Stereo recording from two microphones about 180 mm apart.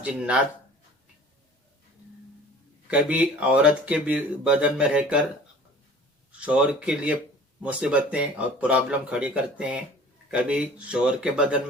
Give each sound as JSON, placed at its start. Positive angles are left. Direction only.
{"t": 0.0, "sound": "speech", "side_deg": -5}
{"t": 2.8, "sound": "speech", "side_deg": -5}
{"t": 6.4, "sound": "speech", "side_deg": -5}